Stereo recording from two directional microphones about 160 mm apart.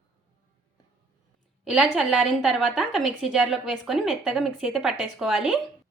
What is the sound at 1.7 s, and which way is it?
A woman's voice, 5° right (ahead or behind).